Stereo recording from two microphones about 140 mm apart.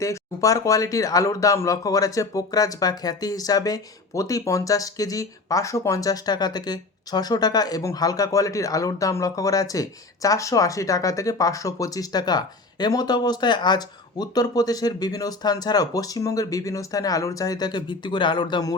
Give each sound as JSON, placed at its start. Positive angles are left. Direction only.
{"t": 0.0, "sound": "speech", "side_deg": 25}